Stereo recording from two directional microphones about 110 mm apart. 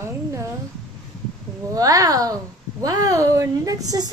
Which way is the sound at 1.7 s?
35° right (ahead or behind).